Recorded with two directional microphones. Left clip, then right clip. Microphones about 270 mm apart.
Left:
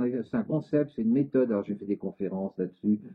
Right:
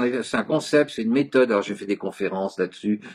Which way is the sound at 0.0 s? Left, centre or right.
Centre.